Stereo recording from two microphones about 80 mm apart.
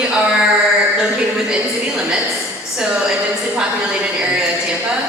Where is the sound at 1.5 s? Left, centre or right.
Centre.